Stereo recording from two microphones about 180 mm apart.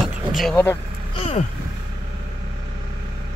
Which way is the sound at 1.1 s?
30° left (ahead or behind).